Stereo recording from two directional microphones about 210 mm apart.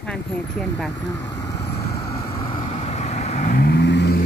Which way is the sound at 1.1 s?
15° left (ahead or behind).